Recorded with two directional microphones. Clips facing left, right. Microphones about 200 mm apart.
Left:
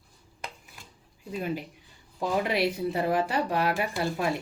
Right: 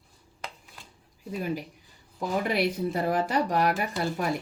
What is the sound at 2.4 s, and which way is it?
Speech, 45° right (ahead or behind).